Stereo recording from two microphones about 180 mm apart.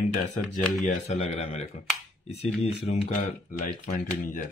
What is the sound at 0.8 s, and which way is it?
Speech, 40° left (ahead or behind).